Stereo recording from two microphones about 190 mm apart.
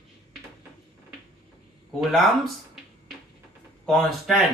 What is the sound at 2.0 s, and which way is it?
Speech, centre (ahead or behind).